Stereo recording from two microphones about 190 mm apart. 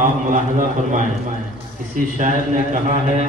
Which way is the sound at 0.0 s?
45° right (ahead or behind).